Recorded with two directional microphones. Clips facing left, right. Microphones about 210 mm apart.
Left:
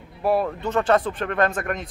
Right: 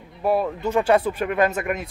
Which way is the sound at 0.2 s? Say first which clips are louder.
Even; centre (ahead or behind).